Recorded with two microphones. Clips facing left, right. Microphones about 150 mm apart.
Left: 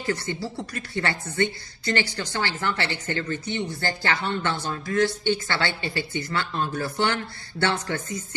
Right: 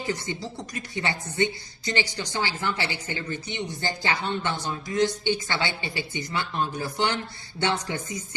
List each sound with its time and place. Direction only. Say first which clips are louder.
0.0 s speech: left 2 dB; 15° right (ahead or behind)